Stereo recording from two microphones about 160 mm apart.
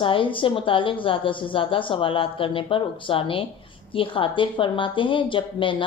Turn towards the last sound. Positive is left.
turn(degrees=30)  # may be behind; listen again after turning